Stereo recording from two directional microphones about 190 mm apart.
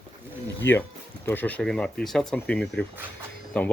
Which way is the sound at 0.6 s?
75° left (ahead or behind).